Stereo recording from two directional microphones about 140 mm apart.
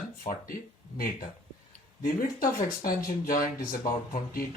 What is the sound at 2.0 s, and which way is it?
Speech, 80° left.